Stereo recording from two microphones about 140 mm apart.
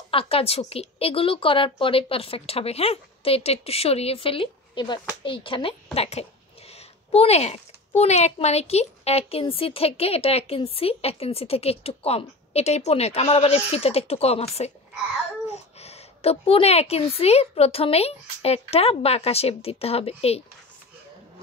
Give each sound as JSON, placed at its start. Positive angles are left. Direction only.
{"t": 0.1, "sound": "speech", "side_deg": 40}